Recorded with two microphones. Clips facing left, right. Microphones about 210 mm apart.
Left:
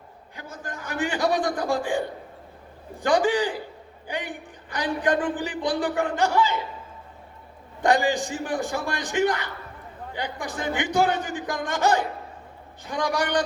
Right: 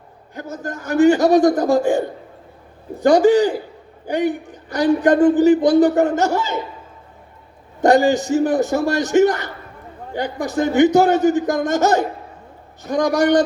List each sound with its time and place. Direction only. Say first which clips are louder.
0.3 s speech: right 9 dB; 45° right (ahead or behind)
7.8 s speech: right 8 dB; 45° right (ahead or behind)